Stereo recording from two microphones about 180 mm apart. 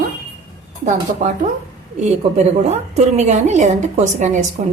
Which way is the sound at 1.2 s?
45° right (ahead or behind).